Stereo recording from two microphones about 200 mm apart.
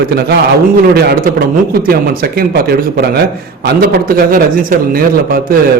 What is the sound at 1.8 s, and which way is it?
Speech, 50° right (ahead or behind).